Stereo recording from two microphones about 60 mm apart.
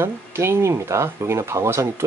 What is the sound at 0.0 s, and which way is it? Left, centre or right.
Speech, right.